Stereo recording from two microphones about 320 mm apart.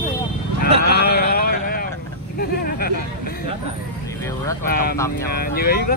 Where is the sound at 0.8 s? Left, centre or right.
Left.